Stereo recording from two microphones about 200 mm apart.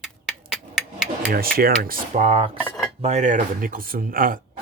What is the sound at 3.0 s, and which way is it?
Speech, 35° right (ahead or behind).